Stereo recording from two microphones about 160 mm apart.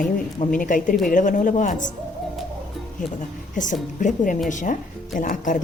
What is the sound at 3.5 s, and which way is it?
Speech, 50° left (ahead or behind).